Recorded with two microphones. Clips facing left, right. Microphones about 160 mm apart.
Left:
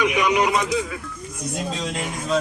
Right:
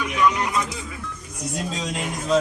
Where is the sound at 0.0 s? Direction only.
90° left.